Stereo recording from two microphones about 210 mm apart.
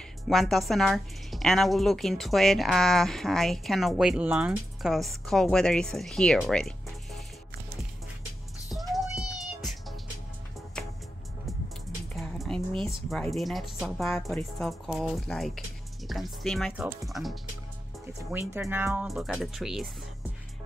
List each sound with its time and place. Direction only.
0.3 s speech: centre (ahead or behind)
8.9 s cat: centre (ahead or behind)
12.2 s a sound: centre (ahead or behind)
13.1 s speech: centre (ahead or behind)
18.5 s speech: 10° right (ahead or behind)